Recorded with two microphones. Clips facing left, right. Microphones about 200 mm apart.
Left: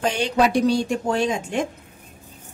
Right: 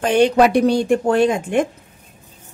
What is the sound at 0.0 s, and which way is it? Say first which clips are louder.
Speech: right 7 dB; 60° right (ahead or behind).